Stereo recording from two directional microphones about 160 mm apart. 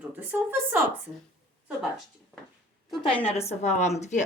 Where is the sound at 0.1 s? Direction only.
10° right (ahead or behind).